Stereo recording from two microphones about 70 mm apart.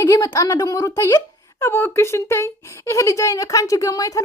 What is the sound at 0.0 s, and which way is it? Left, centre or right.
Speech, left.